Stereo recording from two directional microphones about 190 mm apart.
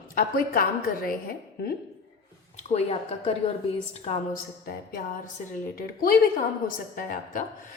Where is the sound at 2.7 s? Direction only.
35° left (ahead or behind).